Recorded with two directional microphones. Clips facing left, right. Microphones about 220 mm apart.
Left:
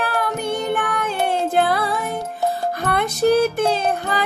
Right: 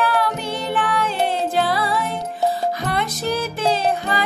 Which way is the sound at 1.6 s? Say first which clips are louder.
Left 1 dB; 50° left (ahead or behind).